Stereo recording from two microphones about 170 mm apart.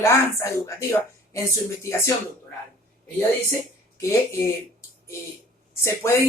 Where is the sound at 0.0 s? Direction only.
15° left (ahead or behind).